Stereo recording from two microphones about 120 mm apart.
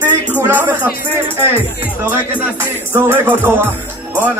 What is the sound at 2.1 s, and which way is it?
Music, 15° right (ahead or behind).